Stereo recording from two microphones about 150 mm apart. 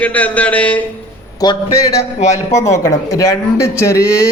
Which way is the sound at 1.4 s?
25° left (ahead or behind).